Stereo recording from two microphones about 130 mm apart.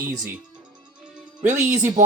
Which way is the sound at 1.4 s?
65° right (ahead or behind).